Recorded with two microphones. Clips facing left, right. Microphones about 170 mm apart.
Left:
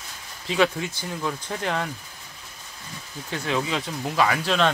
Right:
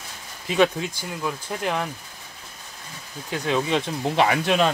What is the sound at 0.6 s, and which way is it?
Speech, 15° right (ahead or behind).